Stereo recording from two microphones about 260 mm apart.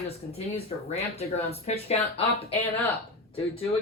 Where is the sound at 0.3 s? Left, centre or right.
Left.